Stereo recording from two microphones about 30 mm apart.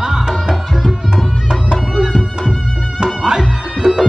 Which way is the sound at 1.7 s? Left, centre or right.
Right.